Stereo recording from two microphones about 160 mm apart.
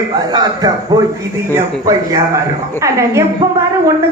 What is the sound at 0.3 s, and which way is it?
A man's voice, 25° right (ahead or behind).